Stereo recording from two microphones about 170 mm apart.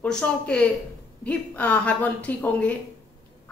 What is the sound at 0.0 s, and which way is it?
A woman's voice, 5° left (ahead or behind).